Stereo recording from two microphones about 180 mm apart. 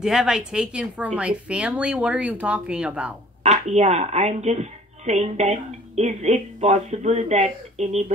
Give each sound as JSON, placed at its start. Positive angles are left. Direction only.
{"t": 0.0, "sound": "speech", "side_deg": -5}
{"t": 3.4, "sound": "a woman's voice", "side_deg": -40}